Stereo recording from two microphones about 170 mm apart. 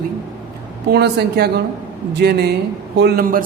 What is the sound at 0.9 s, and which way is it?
A woman's voice, 75° right (ahead or behind).